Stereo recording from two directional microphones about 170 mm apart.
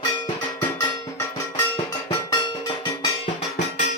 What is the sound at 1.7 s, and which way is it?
Cowbell, 25° left (ahead or behind).